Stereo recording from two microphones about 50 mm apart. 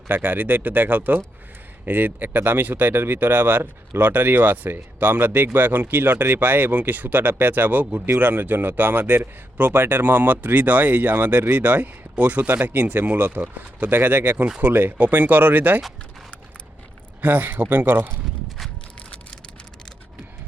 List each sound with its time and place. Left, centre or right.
0.1 s speech: right
13.9 s speech: right
17.2 s speech: right